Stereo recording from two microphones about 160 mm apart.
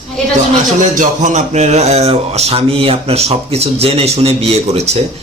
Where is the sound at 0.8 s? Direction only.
50° right (ahead or behind).